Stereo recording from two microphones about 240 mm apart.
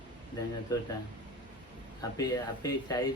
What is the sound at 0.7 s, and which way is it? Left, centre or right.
Speech, centre.